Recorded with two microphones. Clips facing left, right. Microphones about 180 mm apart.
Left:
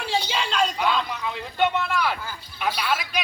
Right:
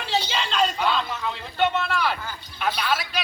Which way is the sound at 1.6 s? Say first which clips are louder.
Even; 10° left (ahead or behind).